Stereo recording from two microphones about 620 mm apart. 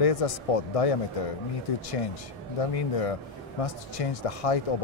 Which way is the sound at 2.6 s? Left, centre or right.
Left.